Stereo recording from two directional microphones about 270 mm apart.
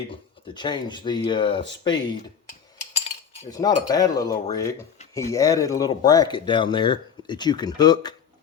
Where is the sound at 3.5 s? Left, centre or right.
Centre.